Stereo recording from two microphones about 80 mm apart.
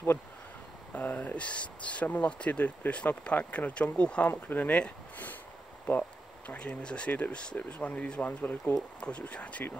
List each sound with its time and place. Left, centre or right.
0.9 s speech: centre